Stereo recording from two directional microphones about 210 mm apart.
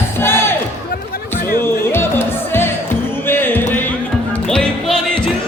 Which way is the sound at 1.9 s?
10° left (ahead or behind).